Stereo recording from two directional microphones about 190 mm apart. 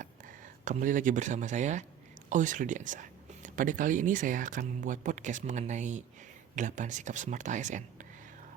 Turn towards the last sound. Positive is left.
turn(degrees=-40)  # may be behind; listen again after turning